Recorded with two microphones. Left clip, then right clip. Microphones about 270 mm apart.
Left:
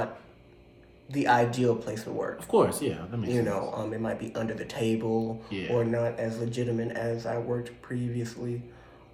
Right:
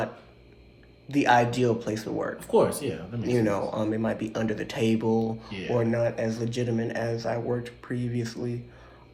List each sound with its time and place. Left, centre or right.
1.0 s speech: right
2.5 s speech: centre
3.2 s speech: right